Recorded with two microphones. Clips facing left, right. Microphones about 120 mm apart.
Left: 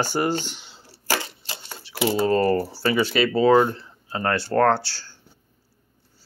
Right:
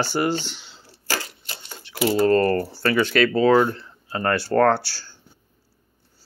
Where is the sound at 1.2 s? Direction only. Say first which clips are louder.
Left 2 dB; 25° left (ahead or behind).